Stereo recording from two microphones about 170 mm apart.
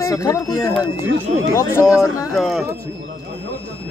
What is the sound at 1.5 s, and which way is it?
Speech, 15° left (ahead or behind).